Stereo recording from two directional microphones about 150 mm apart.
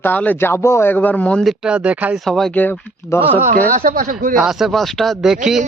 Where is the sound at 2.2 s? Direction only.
Centre (ahead or behind).